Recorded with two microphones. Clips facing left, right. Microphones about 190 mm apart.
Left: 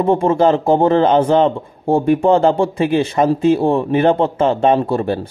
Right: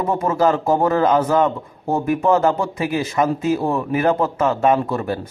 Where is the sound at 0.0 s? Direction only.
30° left (ahead or behind).